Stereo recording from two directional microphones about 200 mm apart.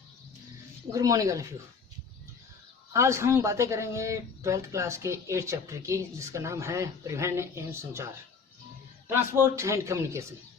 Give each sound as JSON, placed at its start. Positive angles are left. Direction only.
{"t": 0.9, "sound": "speech", "side_deg": -15}
{"t": 2.9, "sound": "speech", "side_deg": -15}